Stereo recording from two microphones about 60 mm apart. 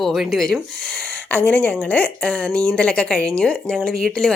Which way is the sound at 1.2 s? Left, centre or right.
Left.